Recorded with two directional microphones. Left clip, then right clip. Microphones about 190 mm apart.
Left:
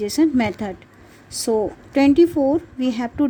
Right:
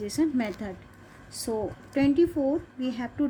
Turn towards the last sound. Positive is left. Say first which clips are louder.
# left 8 dB
turn(degrees=45)  # may be behind; listen again after turning